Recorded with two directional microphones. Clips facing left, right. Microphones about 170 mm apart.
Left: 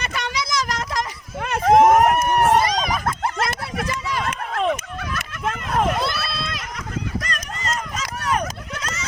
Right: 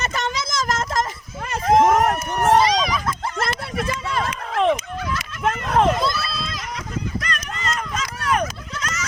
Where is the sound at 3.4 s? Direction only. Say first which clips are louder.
Right 1 dB; 55° right (ahead or behind).